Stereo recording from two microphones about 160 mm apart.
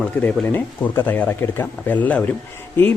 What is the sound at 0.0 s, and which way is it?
A man's voice, 10° left (ahead or behind).